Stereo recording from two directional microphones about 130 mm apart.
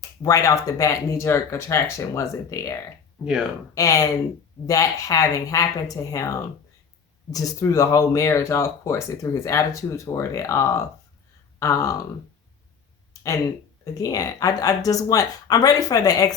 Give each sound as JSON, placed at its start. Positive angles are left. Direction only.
{"t": 0.2, "sound": "speech", "side_deg": 25}
{"t": 3.8, "sound": "speech", "side_deg": 25}
{"t": 14.0, "sound": "speech", "side_deg": 25}